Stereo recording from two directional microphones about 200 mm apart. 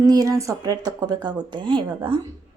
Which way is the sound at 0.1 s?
15° right (ahead or behind).